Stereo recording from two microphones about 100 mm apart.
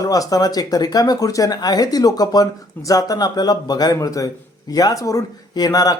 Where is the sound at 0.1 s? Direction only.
40° left (ahead or behind).